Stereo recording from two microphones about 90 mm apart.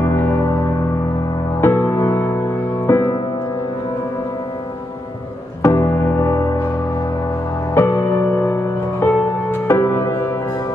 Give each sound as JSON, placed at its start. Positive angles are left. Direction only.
{"t": 0.0, "sound": "music", "side_deg": 30}
{"t": 5.6, "sound": "music", "side_deg": 35}
{"t": 7.8, "sound": "music", "side_deg": 25}